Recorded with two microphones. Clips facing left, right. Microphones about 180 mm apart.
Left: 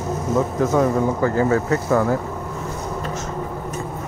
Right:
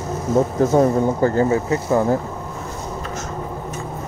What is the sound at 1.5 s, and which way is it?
Music, 20° right (ahead or behind).